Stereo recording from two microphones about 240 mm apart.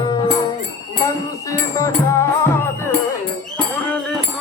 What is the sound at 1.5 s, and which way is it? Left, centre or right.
Music, centre.